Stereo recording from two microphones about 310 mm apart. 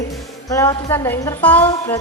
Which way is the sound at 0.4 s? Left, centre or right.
Centre.